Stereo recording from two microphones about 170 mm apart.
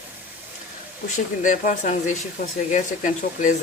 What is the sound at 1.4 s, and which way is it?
Speech, 50° left (ahead or behind).